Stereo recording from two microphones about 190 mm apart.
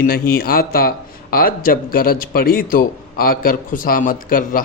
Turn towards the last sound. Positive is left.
turn(degrees=45)  # may be behind; listen again after turning